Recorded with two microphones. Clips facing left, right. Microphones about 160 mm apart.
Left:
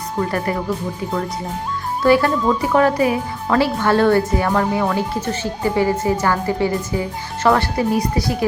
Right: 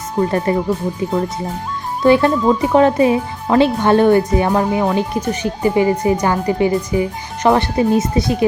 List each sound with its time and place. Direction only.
0.2 s speech: 25° right (ahead or behind)
2.0 s speech: 20° right (ahead or behind)